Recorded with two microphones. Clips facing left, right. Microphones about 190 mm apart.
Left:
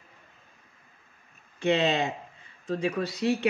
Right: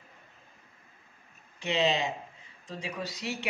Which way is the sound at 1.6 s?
60° left (ahead or behind).